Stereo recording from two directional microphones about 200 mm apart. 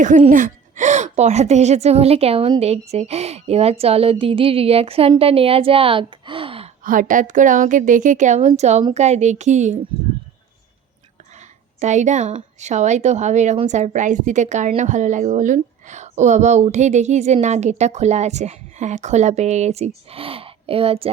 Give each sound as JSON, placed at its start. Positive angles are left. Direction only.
{"t": 0.2, "sound": "a woman's voice", "side_deg": -35}
{"t": 6.8, "sound": "a woman's voice", "side_deg": -40}
{"t": 11.8, "sound": "a woman's voice", "side_deg": -35}